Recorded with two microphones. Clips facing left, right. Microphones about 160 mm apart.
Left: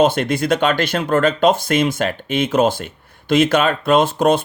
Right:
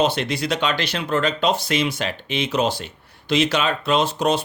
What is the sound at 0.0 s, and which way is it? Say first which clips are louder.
Speech: left 5 dB; 50° left (ahead or behind).